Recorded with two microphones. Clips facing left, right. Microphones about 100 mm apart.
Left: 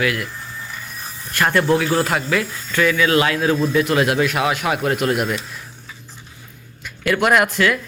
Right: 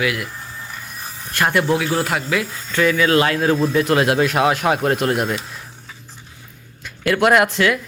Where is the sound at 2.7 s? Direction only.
30° right (ahead or behind).